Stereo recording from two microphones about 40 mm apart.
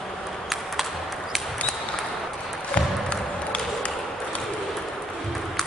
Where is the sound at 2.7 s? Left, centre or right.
Left.